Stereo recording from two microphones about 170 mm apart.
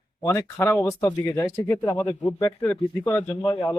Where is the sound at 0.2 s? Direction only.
15° left (ahead or behind).